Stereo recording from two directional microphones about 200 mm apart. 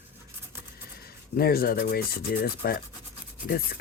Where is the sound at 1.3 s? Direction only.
50° left (ahead or behind).